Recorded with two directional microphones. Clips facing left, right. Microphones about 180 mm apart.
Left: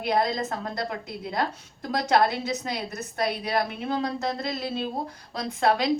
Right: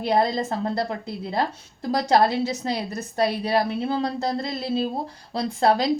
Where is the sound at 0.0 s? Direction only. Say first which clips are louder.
Right 3 dB; 30° right (ahead or behind).